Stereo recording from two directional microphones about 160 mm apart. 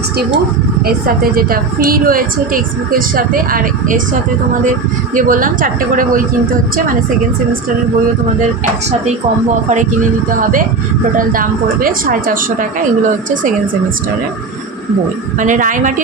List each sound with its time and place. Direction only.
0.9 s a woman's voice: 70° right (ahead or behind)
5.1 s a woman's voice: 60° right (ahead or behind)
9.6 s a woman's voice: 50° right (ahead or behind)
11.2 s a woman's voice: 60° right (ahead or behind)
15.4 s a woman's voice: 55° right (ahead or behind)